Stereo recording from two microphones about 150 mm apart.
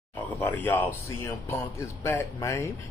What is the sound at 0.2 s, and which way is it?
Speech, 10° left (ahead or behind).